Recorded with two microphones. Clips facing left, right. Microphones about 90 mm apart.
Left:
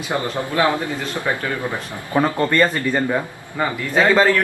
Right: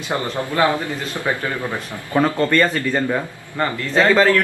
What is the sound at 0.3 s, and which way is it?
A man's voice, 20° left (ahead or behind).